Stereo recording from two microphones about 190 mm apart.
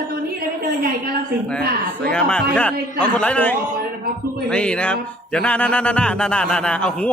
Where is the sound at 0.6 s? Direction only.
55° right (ahead or behind).